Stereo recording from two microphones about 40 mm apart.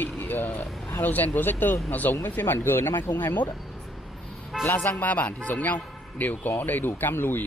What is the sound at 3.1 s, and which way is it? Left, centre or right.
Speech, left.